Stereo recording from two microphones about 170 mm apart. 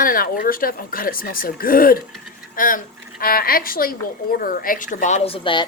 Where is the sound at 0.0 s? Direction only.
55° left (ahead or behind); by 5.6 s 30° left (ahead or behind).